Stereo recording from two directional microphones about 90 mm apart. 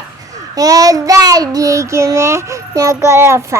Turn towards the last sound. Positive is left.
turn(degrees=-30)  # may be behind; listen again after turning